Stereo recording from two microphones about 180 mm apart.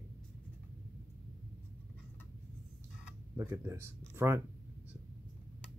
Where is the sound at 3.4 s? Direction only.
15° right (ahead or behind).